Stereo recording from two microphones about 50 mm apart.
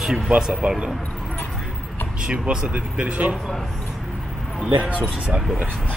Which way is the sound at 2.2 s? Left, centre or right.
Right.